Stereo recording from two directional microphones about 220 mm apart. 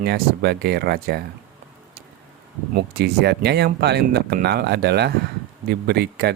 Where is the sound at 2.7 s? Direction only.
45° right (ahead or behind).